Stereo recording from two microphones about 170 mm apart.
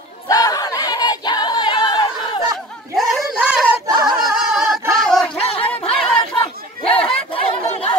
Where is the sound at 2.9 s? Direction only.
5° right (ahead or behind).